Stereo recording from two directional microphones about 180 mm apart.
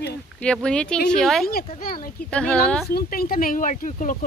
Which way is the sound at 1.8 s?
50° left (ahead or behind).